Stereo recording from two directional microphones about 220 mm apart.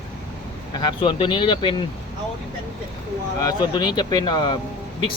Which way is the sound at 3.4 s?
20° left (ahead or behind).